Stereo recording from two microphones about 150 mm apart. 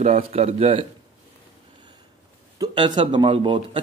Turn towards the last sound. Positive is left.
turn(degrees=-35)  # may be behind; listen again after turning